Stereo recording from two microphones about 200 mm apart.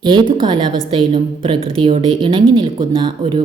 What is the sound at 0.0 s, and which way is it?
A woman's voice, 25° right (ahead or behind).